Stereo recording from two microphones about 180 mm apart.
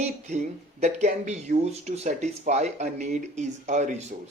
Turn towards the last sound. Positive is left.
turn(degrees=-40)  # may be behind; listen again after turning